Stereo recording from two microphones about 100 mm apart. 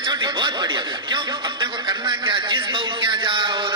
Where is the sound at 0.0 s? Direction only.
50° right (ahead or behind).